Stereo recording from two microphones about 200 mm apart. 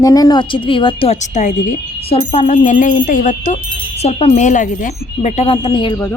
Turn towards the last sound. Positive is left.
turn(degrees=25)  # may be behind; listen again after turning